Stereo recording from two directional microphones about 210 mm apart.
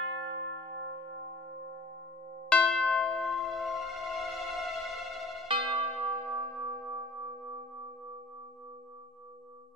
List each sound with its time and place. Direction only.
0.0 s a sound: 60° right (ahead or behind)
2.5 s church bell: 5° left (ahead or behind)
5.5 s church bell: 25° right (ahead or behind)
6.9 s music: 25° right (ahead or behind)